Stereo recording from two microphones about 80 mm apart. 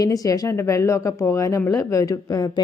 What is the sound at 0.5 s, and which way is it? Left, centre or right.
Speech, left.